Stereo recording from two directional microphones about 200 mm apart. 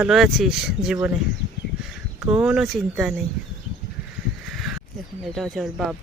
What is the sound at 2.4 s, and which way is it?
Speech, 5° right (ahead or behind).